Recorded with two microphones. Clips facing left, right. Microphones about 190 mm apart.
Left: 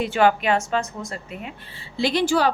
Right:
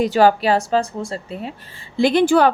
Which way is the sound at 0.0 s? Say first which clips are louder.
Right 4 dB; 35° right (ahead or behind).